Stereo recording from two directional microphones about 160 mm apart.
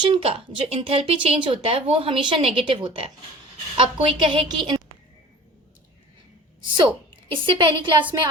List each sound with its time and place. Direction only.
0.0 s a woman's voice: 35° right (ahead or behind)
6.7 s a woman's voice: 30° right (ahead or behind)